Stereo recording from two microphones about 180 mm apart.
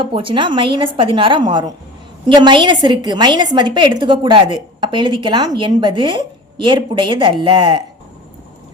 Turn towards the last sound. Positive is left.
turn(degrees=-25)  # may be behind; listen again after turning